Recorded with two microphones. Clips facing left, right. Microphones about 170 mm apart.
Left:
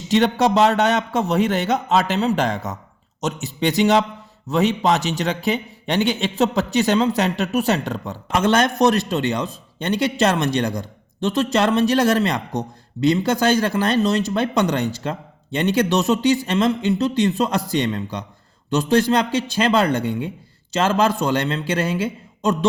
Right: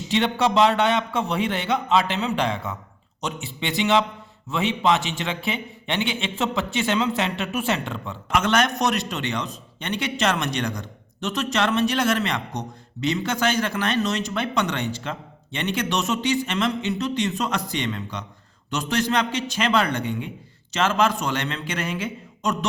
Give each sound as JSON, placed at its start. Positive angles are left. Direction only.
{"t": 0.1, "sound": "a man's voice", "side_deg": 40}